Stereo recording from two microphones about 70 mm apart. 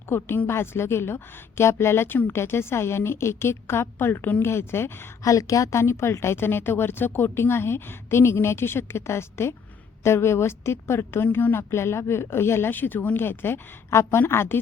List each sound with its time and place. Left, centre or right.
0.1 s a woman's voice: left
5.2 s a woman's voice: left
5.8 s a woman's voice: left